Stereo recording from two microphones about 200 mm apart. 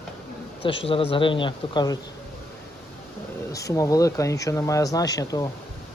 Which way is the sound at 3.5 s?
15° left (ahead or behind).